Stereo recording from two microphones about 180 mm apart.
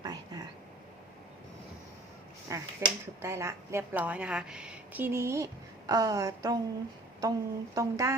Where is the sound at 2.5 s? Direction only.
15° right (ahead or behind).